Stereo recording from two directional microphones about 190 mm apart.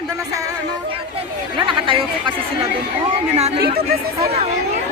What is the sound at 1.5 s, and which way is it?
Chatter, 25° right (ahead or behind).